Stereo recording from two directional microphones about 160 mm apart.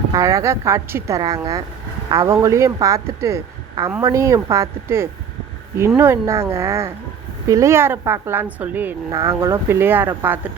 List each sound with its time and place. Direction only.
0.1 s speech: 20° right (ahead or behind)